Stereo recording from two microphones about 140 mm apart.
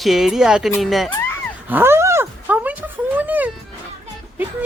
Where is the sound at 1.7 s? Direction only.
15° right (ahead or behind).